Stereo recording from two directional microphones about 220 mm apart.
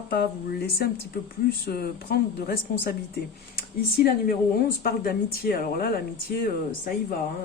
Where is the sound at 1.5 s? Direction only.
45° left (ahead or behind).